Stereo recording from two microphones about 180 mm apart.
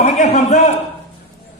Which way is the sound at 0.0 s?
40° left (ahead or behind).